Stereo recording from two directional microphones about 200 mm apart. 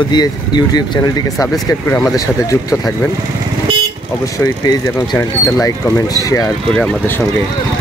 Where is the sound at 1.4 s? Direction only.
15° left (ahead or behind).